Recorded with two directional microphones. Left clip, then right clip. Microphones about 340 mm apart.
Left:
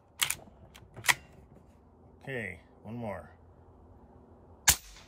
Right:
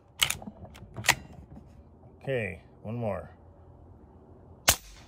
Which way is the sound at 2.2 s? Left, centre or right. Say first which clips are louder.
Right 6 dB; centre.